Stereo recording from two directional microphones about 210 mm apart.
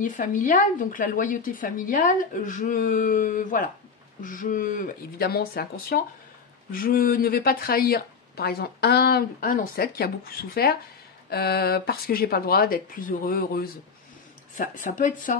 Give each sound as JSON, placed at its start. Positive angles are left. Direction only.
{"t": 0.0, "sound": "a woman's voice", "side_deg": 40}